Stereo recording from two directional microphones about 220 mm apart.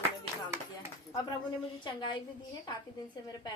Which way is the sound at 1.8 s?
20° left (ahead or behind).